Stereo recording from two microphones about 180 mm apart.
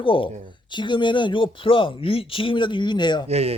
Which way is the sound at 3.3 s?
35° right (ahead or behind).